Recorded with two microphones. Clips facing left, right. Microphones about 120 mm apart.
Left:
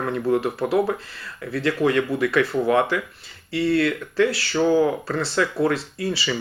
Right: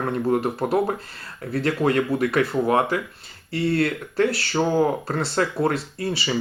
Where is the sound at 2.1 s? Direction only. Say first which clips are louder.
Even; 50° right (ahead or behind).